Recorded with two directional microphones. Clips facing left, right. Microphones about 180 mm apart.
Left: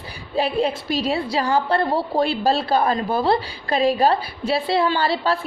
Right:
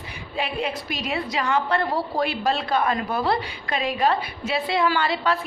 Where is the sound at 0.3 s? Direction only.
30° left (ahead or behind).